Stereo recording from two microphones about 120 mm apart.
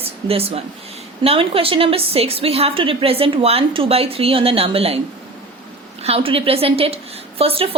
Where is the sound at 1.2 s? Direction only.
55° right (ahead or behind).